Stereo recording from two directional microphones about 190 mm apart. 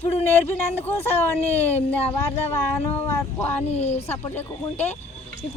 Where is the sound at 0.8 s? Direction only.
10° left (ahead or behind).